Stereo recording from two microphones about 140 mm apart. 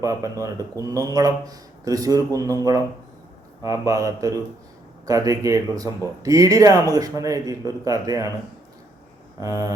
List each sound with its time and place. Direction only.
0.0 s a man's voice: 25° right (ahead or behind)
9.4 s a man's voice: 25° right (ahead or behind)